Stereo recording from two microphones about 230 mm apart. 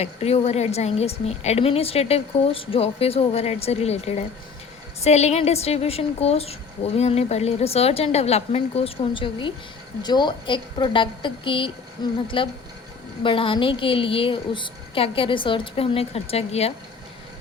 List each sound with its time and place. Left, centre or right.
0.0 s a woman's voice: left
13.2 s a woman's voice: left